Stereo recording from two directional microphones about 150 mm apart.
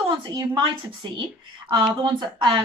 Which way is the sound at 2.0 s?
30° right (ahead or behind).